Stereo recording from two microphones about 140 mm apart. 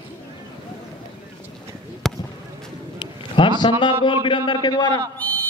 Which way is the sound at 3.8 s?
35° left (ahead or behind).